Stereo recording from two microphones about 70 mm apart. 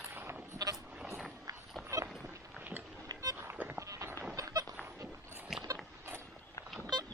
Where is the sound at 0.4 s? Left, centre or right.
Right.